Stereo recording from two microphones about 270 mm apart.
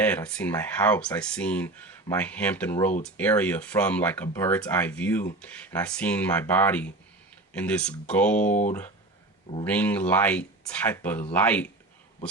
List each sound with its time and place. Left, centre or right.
0.0 s speech: centre
8.4 s speech: left
9.6 s speech: centre